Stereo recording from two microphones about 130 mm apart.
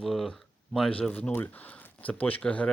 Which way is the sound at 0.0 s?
Centre (ahead or behind).